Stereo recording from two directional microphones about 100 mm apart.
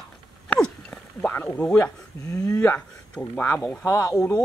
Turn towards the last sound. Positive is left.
turn(degrees=30)  # may be behind; listen again after turning